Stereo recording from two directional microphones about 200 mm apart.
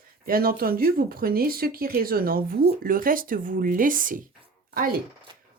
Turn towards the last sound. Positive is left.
turn(degrees=-45)  # may be behind; listen again after turning